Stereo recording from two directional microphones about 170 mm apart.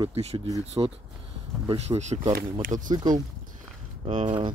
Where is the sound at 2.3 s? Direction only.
50° right (ahead or behind).